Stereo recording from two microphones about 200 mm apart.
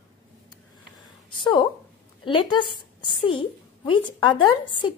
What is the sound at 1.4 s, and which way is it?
A woman's voice, 20° left (ahead or behind).